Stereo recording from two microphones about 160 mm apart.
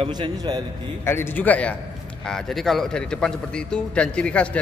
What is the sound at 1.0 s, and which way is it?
A man's voice, 15° left (ahead or behind).